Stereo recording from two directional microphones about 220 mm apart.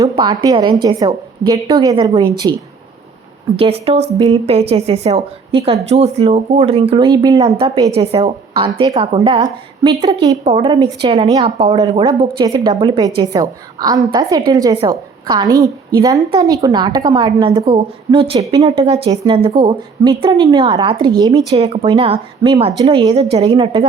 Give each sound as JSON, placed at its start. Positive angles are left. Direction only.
{"t": 0.0, "sound": "a woman's voice", "side_deg": -20}
{"t": 3.6, "sound": "a woman's voice", "side_deg": -25}